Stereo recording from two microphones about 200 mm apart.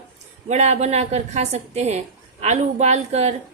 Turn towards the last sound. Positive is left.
turn(degrees=-35)  # may be behind; listen again after turning